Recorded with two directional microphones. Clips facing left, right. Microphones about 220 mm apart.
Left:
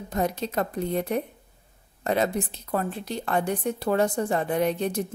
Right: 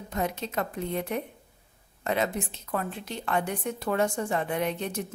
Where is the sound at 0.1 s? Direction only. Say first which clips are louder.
Left 4 dB; 35° left (ahead or behind).